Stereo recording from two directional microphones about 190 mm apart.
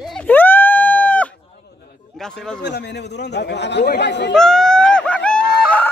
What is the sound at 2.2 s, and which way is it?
Speech, 5° left (ahead or behind).